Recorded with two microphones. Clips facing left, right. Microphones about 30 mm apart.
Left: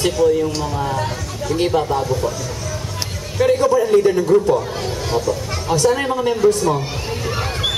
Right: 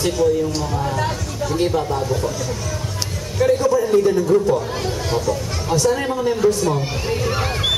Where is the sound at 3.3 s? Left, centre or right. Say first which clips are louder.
Left 2 dB; centre.